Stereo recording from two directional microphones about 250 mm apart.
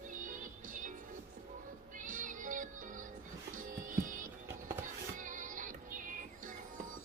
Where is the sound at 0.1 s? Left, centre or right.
Right.